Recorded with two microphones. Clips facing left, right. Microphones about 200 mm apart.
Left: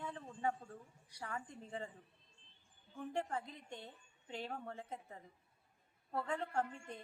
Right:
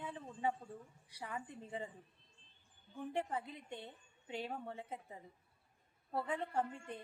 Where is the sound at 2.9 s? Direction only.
15° right (ahead or behind).